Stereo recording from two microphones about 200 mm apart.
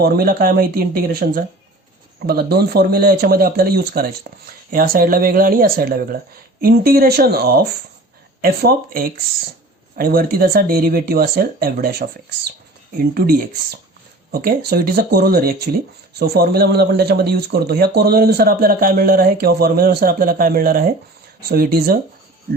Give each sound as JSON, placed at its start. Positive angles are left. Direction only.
{"t": 0.0, "sound": "speech", "side_deg": -50}
{"t": 13.1, "sound": "speech", "side_deg": -50}